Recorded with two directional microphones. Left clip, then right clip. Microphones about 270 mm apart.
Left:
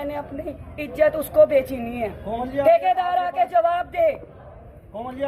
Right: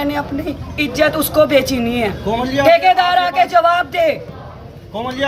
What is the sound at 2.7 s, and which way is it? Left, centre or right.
A man's voice, centre.